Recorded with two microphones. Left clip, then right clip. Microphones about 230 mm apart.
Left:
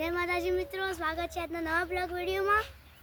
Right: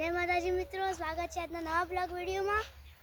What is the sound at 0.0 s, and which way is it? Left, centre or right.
A child's voice, left.